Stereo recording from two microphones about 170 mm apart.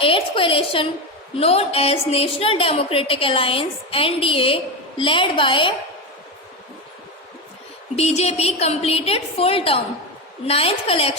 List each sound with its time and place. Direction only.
0.0 s a woman's voice: 30° left (ahead or behind)
7.9 s a woman's voice: 40° left (ahead or behind)